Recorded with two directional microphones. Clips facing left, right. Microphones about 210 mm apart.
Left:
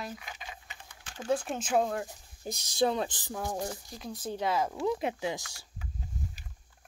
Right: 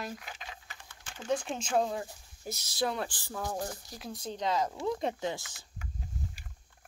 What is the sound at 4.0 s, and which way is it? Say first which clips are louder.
Speech: left 2 dB; centre (ahead or behind).